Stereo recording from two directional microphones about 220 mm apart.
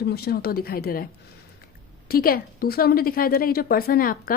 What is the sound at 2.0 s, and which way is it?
A woman's voice, 40° left (ahead or behind).